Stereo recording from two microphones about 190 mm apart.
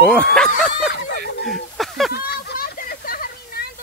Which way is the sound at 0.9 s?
50° left (ahead or behind).